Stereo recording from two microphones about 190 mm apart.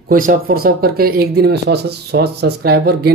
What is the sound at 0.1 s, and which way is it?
Speech, 45° right (ahead or behind).